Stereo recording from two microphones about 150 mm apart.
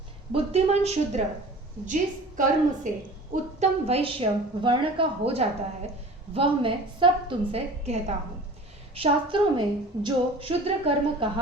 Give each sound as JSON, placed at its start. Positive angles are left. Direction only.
{"t": 0.3, "sound": "a woman's voice", "side_deg": -45}
{"t": 1.9, "sound": "a woman's voice", "side_deg": -60}
{"t": 3.6, "sound": "a woman's voice", "side_deg": -45}
{"t": 9.0, "sound": "a woman's voice", "side_deg": -30}